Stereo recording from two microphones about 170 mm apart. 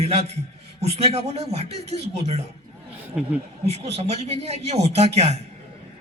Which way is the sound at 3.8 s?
40° right (ahead or behind).